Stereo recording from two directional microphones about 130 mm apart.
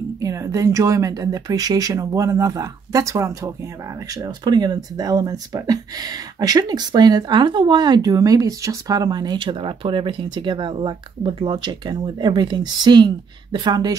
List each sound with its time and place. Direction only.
0.2 s speech: 25° right (ahead or behind)